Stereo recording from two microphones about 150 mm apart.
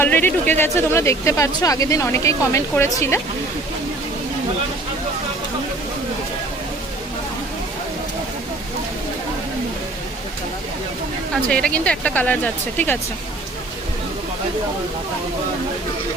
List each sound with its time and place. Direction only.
0.0 s speech: 10° left (ahead or behind)
11.5 s speech: 5° left (ahead or behind)